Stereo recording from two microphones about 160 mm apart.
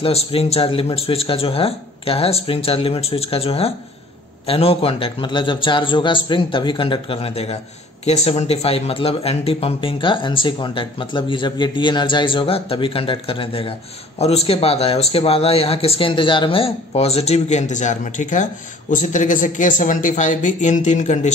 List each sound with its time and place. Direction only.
0.0 s speech: 40° left (ahead or behind)